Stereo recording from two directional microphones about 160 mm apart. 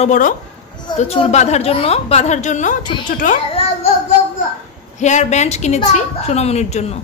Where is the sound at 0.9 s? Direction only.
40° left (ahead or behind); by 3.3 s 55° left (ahead or behind).